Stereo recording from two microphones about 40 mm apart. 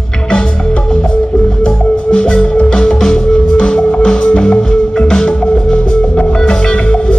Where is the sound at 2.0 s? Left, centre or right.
Left.